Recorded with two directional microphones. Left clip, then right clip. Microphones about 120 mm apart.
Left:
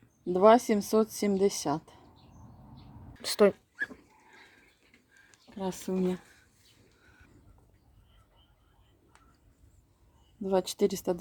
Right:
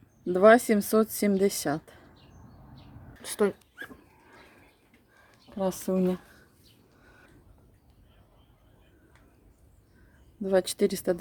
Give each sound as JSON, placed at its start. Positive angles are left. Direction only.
{"t": 0.3, "sound": "a woman's voice", "side_deg": -25}
{"t": 3.2, "sound": "speech", "side_deg": 15}
{"t": 5.5, "sound": "speech", "side_deg": -40}
{"t": 10.4, "sound": "a woman's voice", "side_deg": -25}